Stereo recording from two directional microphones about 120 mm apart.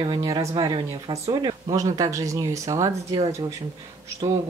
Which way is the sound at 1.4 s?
30° right (ahead or behind).